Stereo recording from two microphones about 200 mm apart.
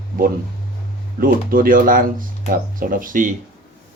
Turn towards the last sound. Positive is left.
turn(degrees=-40)  # may be behind; listen again after turning